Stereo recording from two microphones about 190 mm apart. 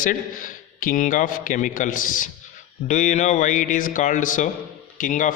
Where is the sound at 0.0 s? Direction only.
45° left (ahead or behind).